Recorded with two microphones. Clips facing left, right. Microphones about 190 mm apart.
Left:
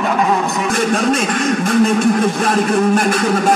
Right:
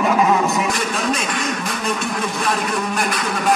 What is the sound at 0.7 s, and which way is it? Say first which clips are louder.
Speech: left 6 dB; 50° left (ahead or behind).